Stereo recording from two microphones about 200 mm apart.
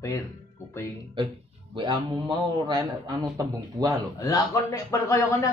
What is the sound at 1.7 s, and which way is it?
A man's voice, 25° right (ahead or behind).